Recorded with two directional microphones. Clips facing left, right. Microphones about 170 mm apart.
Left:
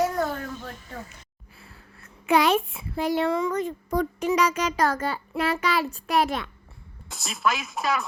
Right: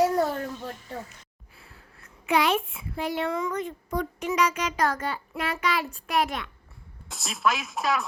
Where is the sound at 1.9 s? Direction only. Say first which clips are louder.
Left 3 dB; 40° left (ahead or behind).